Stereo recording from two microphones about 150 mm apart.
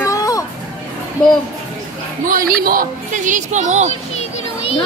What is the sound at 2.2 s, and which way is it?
A woman's voice, 75° right (ahead or behind).